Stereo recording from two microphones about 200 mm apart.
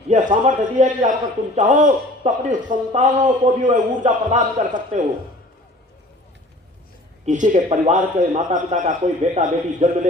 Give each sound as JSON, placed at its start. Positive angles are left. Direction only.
{"t": 0.1, "sound": "a man's voice", "side_deg": -40}
{"t": 7.3, "sound": "a man's voice", "side_deg": -40}